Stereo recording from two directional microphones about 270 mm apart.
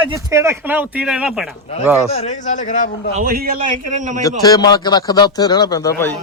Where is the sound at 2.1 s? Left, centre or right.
Left.